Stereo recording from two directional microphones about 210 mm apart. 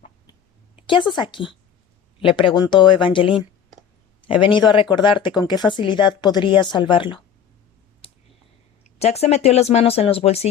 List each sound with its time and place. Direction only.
0.8 s speech: 25° left (ahead or behind)
8.0 s clicking: 25° left (ahead or behind)
9.0 s speech: 30° left (ahead or behind)